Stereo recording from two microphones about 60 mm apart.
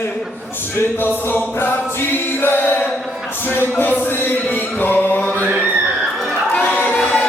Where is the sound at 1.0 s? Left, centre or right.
Left.